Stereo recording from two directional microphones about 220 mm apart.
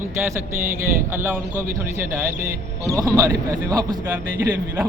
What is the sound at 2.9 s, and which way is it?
Speech, 15° right (ahead or behind).